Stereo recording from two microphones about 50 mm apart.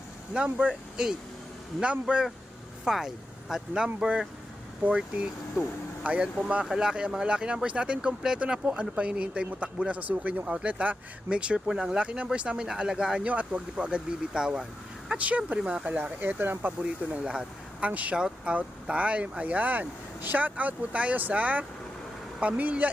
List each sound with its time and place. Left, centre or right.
0.3 s speech: right
2.8 s speech: centre
5.6 s speech: right
6.7 s speech: centre; by 10.4 s right
10.4 s speech: centre
10.7 s speech: right
13.2 s speech: right; by 14.7 s centre
15.2 s speech: right
15.9 s speech: right
17.2 s speech: right